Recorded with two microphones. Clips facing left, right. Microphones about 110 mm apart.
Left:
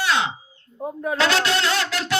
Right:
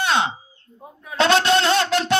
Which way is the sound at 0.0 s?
25° right (ahead or behind).